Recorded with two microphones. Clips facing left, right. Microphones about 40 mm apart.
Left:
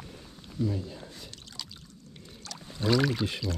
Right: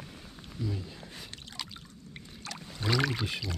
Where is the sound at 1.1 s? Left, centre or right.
Right.